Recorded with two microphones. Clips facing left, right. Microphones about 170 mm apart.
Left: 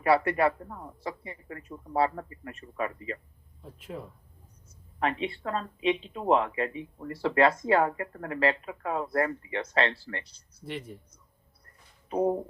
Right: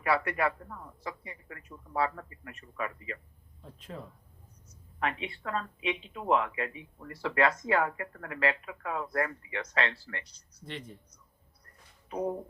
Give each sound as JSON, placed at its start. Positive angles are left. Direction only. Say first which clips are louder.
{"t": 0.0, "sound": "speech", "louder": "left 5 dB", "side_deg": 30}
{"t": 3.6, "sound": "speech", "louder": "left 4 dB", "side_deg": 10}
{"t": 4.9, "sound": "speech", "louder": "left 4 dB", "side_deg": 30}
{"t": 12.1, "sound": "speech", "louder": "left 6 dB", "side_deg": 30}